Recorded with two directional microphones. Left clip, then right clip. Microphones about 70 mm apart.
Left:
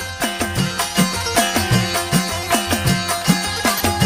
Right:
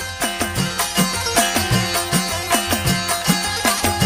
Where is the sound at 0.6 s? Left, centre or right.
Left.